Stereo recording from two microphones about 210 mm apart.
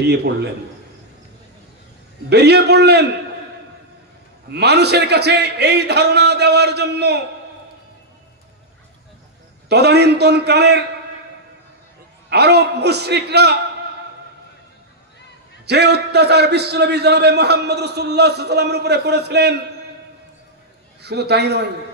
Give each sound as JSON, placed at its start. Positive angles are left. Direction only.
{"t": 0.0, "sound": "a man's voice", "side_deg": -50}
{"t": 2.2, "sound": "a man's voice", "side_deg": -50}
{"t": 4.5, "sound": "a man's voice", "side_deg": -50}
{"t": 9.7, "sound": "a man's voice", "side_deg": -50}
{"t": 12.3, "sound": "a man's voice", "side_deg": -50}
{"t": 15.6, "sound": "a man's voice", "side_deg": -50}
{"t": 21.0, "sound": "a man's voice", "side_deg": -50}